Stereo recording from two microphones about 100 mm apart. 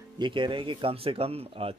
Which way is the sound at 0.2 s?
55° right (ahead or behind).